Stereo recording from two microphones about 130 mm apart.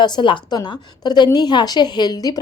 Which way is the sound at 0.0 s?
35° left (ahead or behind).